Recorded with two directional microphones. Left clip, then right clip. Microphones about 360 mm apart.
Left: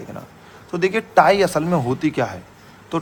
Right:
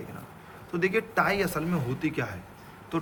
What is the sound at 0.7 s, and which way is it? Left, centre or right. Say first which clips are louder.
A man's voice: left 10 dB; centre.